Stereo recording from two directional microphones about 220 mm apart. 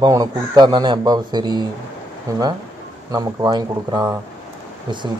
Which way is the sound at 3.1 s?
15° right (ahead or behind).